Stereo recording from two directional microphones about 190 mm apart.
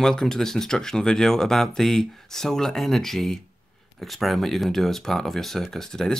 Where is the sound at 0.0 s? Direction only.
5° left (ahead or behind).